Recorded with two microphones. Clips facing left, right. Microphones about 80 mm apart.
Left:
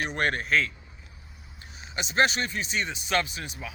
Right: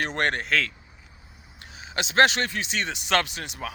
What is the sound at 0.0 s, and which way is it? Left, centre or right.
Speech, right.